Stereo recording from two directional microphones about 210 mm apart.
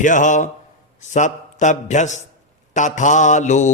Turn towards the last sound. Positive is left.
turn(degrees=35)  # may be behind; listen again after turning